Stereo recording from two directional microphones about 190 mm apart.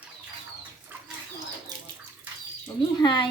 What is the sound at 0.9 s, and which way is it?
Bird, 10° right (ahead or behind).